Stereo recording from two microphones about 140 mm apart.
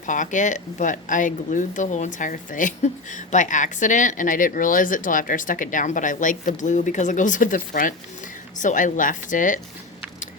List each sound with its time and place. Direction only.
0.0 s speech: 65° left (ahead or behind)